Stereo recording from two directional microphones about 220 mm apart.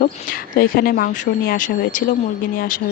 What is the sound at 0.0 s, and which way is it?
Speech, 40° left (ahead or behind).